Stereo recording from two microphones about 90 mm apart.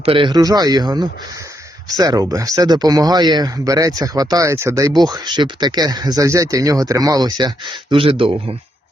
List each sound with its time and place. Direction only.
0.0 s speech: 80° right
0.3 s speech: 45° right (ahead or behind); by 8.3 s 80° right